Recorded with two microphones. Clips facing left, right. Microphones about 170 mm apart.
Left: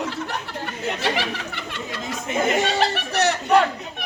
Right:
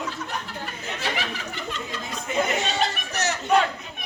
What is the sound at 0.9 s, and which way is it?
Chatter, 70° left (ahead or behind).